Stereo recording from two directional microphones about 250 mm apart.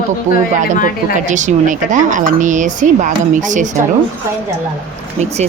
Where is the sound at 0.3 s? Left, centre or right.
Right.